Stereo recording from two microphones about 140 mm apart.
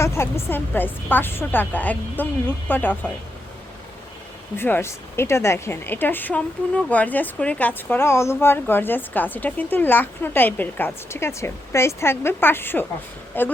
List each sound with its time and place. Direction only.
0.0 s speech: 20° left (ahead or behind)
4.5 s speech: 15° left (ahead or behind)